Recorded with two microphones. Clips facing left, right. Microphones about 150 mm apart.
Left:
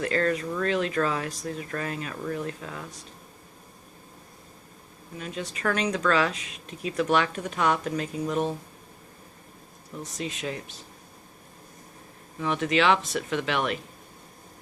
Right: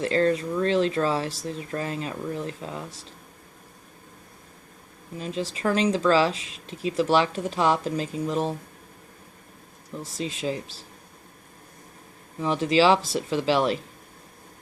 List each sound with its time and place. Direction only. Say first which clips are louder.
0.0 s speech: right 3 dB; 30° right (ahead or behind)
5.1 s speech: right 4 dB; 30° right (ahead or behind)
10.2 s speech: right 4 dB; 30° right (ahead or behind)
12.4 s speech: right 4 dB; 30° right (ahead or behind)